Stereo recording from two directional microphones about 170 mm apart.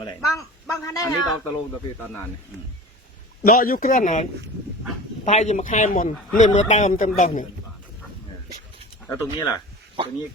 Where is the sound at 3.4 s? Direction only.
60° left (ahead or behind).